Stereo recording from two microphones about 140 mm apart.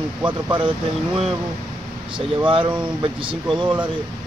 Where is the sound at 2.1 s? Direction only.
35° right (ahead or behind).